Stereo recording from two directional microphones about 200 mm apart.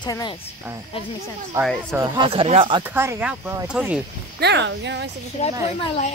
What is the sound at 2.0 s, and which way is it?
Speech, 25° right (ahead or behind).